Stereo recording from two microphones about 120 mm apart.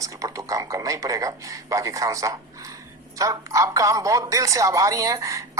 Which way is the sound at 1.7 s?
25° right (ahead or behind).